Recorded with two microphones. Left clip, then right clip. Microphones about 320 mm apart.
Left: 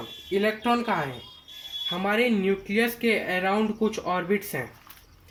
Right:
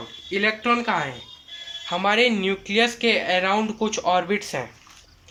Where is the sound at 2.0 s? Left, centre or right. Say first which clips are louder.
Right 5 dB; right.